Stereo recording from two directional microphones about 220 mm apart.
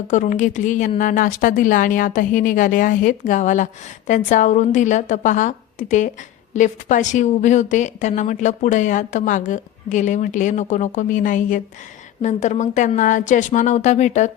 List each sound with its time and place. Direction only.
0.1 s a woman's voice: 35° left (ahead or behind)